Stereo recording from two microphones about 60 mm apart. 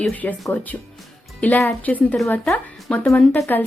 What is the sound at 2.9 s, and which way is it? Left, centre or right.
Speech, centre.